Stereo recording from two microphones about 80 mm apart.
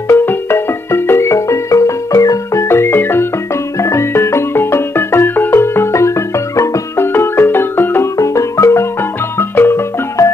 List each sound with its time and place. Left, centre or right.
0.1 s music: left
8.2 s music: left
9.4 s marimba: left